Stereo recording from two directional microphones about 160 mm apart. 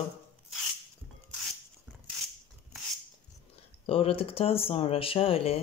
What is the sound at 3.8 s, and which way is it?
Speech, 35° left (ahead or behind).